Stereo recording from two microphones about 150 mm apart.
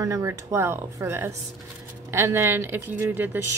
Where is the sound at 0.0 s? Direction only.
20° right (ahead or behind).